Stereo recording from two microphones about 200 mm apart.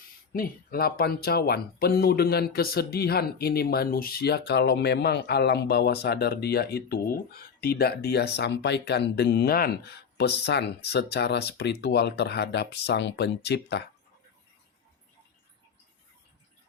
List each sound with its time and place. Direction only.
0.3 s speech: 45° left (ahead or behind)